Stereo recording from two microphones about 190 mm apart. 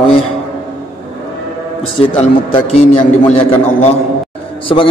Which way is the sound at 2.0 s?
30° left (ahead or behind).